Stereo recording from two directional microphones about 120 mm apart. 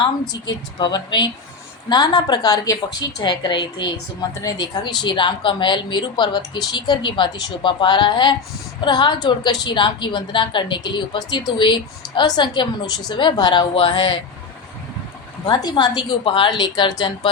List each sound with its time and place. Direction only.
0.4 s a woman's voice: 35° left (ahead or behind)
15.4 s a woman's voice: 40° left (ahead or behind)